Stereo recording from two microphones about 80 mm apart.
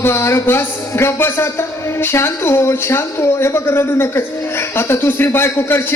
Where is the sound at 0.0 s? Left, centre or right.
Left.